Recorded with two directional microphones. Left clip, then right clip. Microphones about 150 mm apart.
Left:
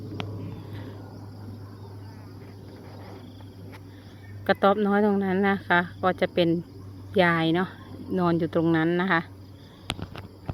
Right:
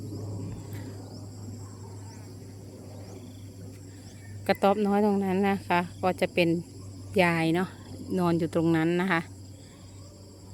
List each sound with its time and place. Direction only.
4.4 s speech: 15° right (ahead or behind)